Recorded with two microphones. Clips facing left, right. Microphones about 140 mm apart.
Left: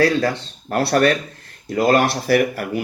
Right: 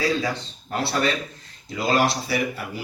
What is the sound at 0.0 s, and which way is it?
Speech, 70° left (ahead or behind).